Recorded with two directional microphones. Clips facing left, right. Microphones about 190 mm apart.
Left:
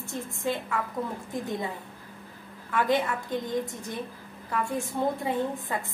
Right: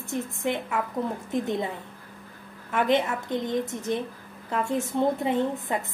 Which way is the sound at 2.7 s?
20° right (ahead or behind).